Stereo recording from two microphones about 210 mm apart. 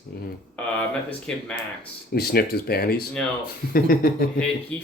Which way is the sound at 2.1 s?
50° left (ahead or behind).